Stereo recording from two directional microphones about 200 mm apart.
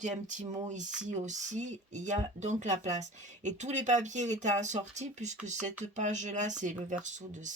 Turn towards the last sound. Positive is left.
turn(degrees=-40)  # may be behind; listen again after turning